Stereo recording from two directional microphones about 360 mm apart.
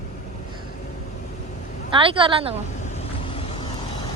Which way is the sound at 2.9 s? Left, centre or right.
Centre.